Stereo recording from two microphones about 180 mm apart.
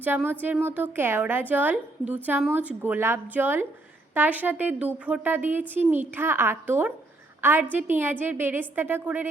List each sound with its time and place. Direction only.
0.1 s a woman's voice: 10° right (ahead or behind)